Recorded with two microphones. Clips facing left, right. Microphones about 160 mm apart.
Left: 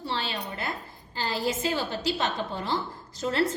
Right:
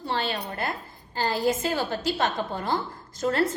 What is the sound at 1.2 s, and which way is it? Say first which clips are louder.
A woman's voice: right 4 dB; 45° right (ahead or behind).